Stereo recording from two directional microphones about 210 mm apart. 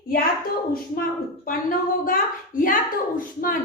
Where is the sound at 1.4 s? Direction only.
40° left (ahead or behind).